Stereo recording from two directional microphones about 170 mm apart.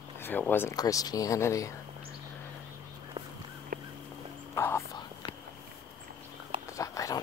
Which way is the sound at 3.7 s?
55° right (ahead or behind).